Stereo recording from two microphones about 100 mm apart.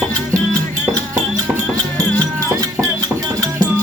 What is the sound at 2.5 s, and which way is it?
Music, 40° right (ahead or behind).